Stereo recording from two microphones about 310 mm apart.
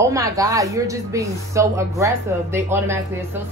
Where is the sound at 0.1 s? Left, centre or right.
Centre.